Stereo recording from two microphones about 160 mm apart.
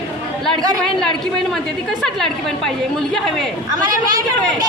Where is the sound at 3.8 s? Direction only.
25° right (ahead or behind).